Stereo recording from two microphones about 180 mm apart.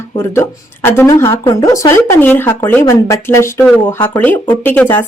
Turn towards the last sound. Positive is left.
turn(degrees=10)  # may be behind; listen again after turning